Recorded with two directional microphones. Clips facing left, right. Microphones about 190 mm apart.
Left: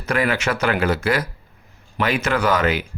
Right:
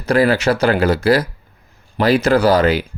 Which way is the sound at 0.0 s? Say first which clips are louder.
Right 7 dB; 35° right (ahead or behind).